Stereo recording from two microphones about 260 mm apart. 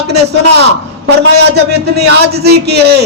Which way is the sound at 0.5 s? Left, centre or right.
Right.